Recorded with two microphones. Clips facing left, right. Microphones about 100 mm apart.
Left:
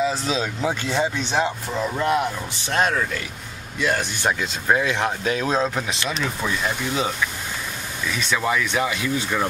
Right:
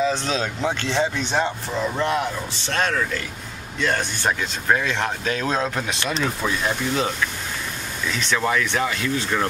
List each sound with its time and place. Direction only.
0.0 s speech: 5° left (ahead or behind)
8.1 s speech: 5° left (ahead or behind)